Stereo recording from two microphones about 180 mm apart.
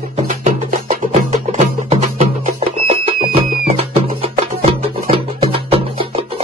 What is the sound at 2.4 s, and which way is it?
Music, 35° right (ahead or behind).